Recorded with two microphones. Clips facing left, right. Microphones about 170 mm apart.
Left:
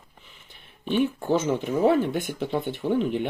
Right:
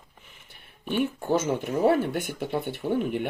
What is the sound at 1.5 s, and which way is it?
Speech, 10° right (ahead or behind).